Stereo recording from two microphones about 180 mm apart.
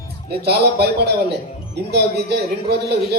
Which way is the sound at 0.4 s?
65° right (ahead or behind).